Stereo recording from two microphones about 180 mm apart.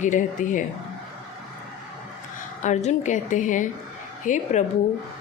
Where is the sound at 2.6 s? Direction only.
40° left (ahead or behind).